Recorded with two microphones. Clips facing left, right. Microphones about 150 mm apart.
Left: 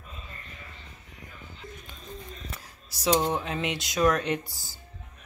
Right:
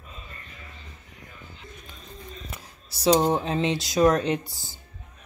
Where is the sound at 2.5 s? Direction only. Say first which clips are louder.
Right 2 dB; 30° right (ahead or behind).